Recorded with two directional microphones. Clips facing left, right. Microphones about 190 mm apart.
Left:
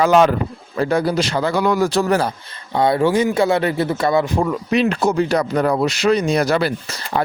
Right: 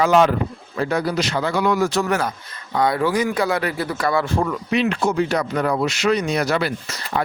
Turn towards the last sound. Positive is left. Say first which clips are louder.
# left 2 dB
turn(degrees=35)  # may be behind; listen again after turning